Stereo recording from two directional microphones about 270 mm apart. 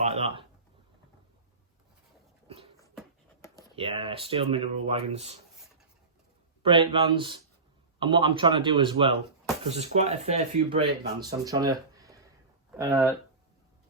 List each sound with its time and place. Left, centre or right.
0.0 s a sound: right
3.8 s speech: centre
6.6 s speech: centre